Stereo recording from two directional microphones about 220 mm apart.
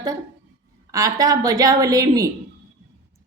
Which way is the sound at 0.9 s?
15° right (ahead or behind).